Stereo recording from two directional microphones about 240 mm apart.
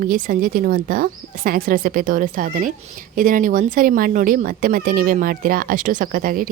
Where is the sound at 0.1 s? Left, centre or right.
Right.